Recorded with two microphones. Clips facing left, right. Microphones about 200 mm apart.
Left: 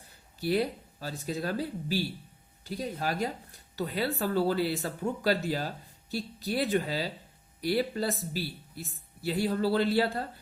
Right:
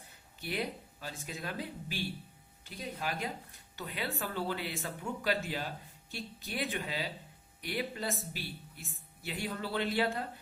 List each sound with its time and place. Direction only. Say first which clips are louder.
0.3 s speech: left 9 dB; 35° left (ahead or behind)